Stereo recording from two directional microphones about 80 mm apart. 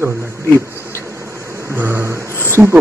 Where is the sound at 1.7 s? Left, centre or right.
Right.